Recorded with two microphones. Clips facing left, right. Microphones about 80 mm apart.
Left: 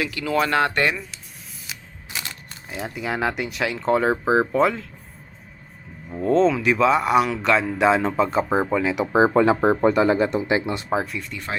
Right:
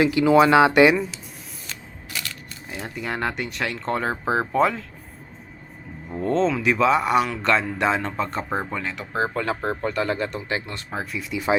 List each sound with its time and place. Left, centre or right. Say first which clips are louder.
0.0 s speech: right 7 dB; right
0.5 s speech: right 6 dB; centre
2.1 s single-lens reflex camera: even; left
2.6 s speech: left 2 dB; centre
6.1 s speech: left 3 dB; centre
10.9 s speech: left 1 dB; centre